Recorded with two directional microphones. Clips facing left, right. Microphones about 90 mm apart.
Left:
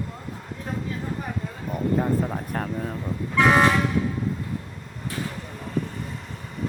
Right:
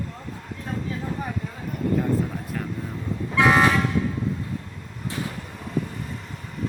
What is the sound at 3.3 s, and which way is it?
Speech, centre (ahead or behind).